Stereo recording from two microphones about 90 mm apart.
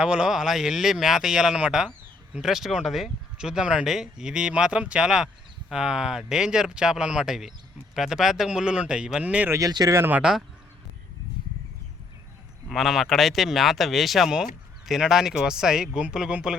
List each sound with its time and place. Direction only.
0.0 s speech: 10° right (ahead or behind)
9.5 s speech: 40° right (ahead or behind)
9.9 s speech: 25° right (ahead or behind)
10.2 s speech: 5° right (ahead or behind)
12.6 s speech: centre (ahead or behind)